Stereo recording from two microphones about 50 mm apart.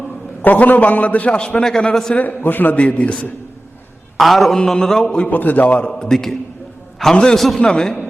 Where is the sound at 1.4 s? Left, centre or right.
Centre.